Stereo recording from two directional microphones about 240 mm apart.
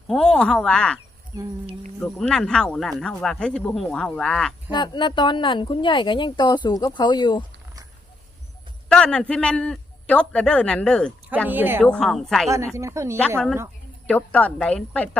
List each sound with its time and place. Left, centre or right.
0.1 s speech: centre
1.3 s speech: centre
2.0 s speech: centre
4.7 s speech: centre
8.9 s speech: centre
11.4 s speech: centre
11.8 s speech: centre
12.7 s speech: centre
14.1 s speech: centre